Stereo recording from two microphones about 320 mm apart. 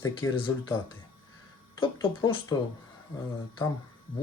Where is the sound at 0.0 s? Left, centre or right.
Centre.